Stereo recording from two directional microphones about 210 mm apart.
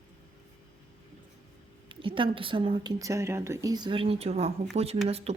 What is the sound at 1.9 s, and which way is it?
Speech, 25° right (ahead or behind).